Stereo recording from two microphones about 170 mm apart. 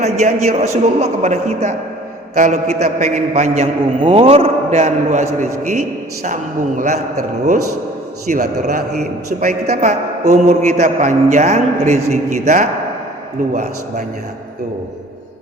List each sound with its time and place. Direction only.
0.0 s a man's voice: 45° right (ahead or behind)
6.2 s a man's voice: 50° right (ahead or behind)
8.3 s a man's voice: 45° right (ahead or behind)